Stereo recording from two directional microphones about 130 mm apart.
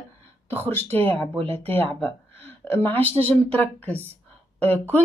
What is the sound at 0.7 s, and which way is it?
Speech, 15° left (ahead or behind).